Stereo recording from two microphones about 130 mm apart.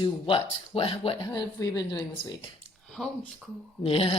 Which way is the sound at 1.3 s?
25° left (ahead or behind).